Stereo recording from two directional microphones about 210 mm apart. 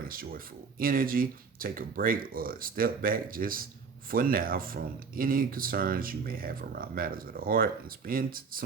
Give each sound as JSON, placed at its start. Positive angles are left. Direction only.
{"t": 0.0, "sound": "speech", "side_deg": -45}